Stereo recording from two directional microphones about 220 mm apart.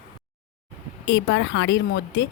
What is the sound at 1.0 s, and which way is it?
A woman's voice, 55° left (ahead or behind).